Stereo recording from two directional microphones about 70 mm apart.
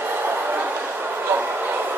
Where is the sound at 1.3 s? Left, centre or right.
Right.